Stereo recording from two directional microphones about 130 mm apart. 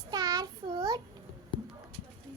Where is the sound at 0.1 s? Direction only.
30° right (ahead or behind).